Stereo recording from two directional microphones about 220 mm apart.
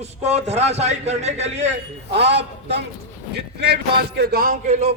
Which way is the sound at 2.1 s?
50° right (ahead or behind).